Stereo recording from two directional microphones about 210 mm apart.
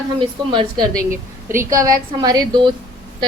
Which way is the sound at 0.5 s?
15° right (ahead or behind).